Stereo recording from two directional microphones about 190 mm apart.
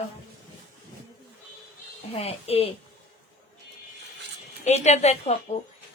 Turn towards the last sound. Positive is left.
turn(degrees=35)  # may be behind; listen again after turning